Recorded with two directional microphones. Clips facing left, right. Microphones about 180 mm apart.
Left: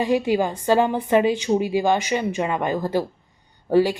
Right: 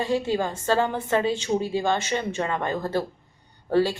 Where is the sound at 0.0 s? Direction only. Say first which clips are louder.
Left 4 dB; 15° left (ahead or behind).